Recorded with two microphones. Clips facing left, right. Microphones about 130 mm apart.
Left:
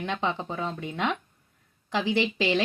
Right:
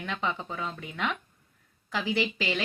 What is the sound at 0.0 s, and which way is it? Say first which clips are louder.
Speech: left 3 dB; 25° left (ahead or behind).